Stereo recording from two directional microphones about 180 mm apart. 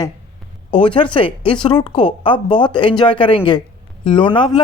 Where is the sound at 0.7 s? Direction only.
30° left (ahead or behind).